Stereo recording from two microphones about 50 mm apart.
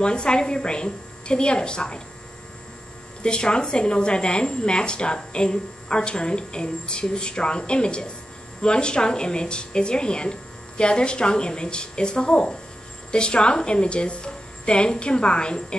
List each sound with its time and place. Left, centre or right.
0.0 s speech: centre
3.2 s a woman's voice: centre